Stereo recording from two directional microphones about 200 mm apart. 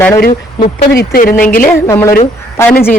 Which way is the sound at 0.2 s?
50° left (ahead or behind).